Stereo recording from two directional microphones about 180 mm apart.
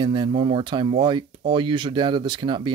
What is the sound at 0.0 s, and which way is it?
Speech, 25° right (ahead or behind).